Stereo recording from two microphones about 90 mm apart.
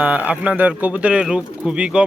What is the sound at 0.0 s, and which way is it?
A man's voice, 15° right (ahead or behind).